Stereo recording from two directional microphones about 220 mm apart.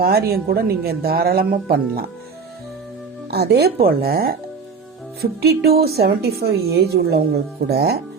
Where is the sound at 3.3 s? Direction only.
45° right (ahead or behind).